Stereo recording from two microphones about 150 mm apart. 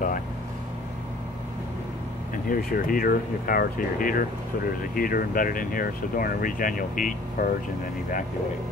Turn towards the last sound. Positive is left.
turn(degrees=70)  # may be behind; listen again after turning